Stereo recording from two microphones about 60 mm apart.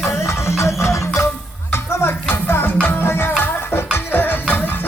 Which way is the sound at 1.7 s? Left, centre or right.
Left.